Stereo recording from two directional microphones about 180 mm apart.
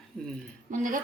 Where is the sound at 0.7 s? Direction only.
45° right (ahead or behind).